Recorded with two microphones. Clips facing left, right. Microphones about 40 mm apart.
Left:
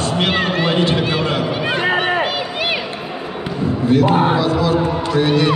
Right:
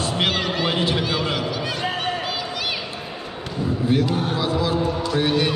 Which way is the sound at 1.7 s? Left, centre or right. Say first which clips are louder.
Left 8 dB; left.